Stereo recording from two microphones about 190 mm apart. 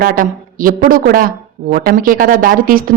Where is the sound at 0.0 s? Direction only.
45° right (ahead or behind).